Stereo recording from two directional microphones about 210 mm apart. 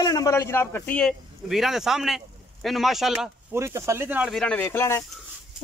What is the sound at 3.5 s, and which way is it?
A man's voice, 10° right (ahead or behind).